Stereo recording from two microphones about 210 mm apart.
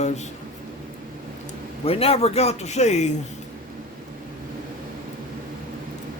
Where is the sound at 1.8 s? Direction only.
30° left (ahead or behind).